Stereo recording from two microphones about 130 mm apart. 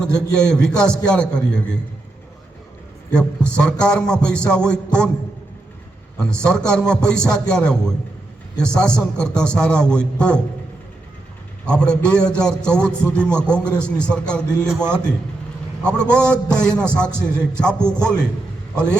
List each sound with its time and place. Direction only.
0.0 s a man's voice: 5° left (ahead or behind)
3.1 s a man's voice: 10° left (ahead or behind)
6.1 s a man's voice: 5° left (ahead or behind)
11.6 s a man's voice: 5° left (ahead or behind)
14.8 s a man's voice: 15° right (ahead or behind)
15.8 s a man's voice: 5° left (ahead or behind)
17.2 s a man's voice: 20° right (ahead or behind)
17.6 s a man's voice: 5° left (ahead or behind)